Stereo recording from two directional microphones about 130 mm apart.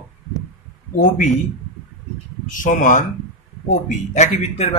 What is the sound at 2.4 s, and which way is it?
Speech, 90° left.